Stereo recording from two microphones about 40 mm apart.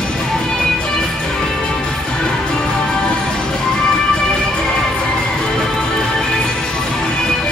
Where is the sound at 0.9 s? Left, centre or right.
Centre.